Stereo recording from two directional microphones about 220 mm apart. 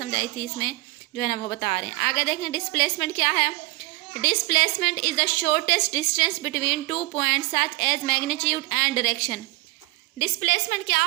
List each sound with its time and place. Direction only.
0.0 s a woman's voice: 35° left (ahead or behind)
10.4 s a woman's voice: 45° left (ahead or behind)